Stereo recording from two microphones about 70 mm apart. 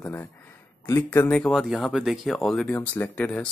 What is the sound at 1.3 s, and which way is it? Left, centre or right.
Speech, centre.